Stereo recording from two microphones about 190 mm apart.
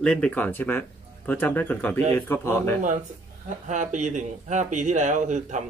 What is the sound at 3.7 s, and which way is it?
Speech, 40° right (ahead or behind).